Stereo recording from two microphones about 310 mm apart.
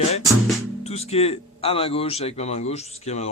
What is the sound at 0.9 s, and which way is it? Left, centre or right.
Speech, centre.